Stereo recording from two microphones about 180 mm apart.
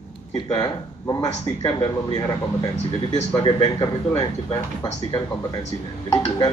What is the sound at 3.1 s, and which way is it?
Speech, 30° left (ahead or behind).